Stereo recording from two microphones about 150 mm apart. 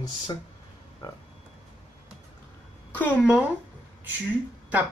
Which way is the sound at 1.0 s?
30° left (ahead or behind).